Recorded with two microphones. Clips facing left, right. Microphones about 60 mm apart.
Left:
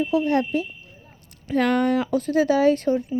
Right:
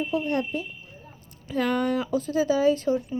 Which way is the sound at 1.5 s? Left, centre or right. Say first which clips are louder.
Left 4 dB; left.